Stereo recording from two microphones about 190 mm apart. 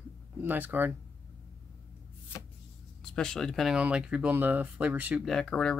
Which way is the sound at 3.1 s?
5° left (ahead or behind).